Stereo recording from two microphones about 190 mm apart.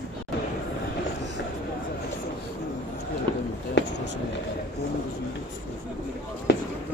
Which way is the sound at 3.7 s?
65° left (ahead or behind).